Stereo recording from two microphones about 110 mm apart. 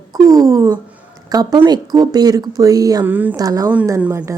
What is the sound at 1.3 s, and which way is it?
Speech, 35° right (ahead or behind).